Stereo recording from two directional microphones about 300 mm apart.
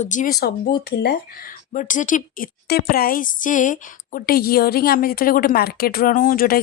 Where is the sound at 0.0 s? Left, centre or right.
Left.